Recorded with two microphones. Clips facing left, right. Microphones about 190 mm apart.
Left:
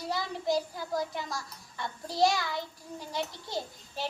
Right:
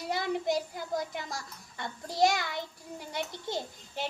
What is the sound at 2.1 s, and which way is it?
Child singing, 20° right (ahead or behind).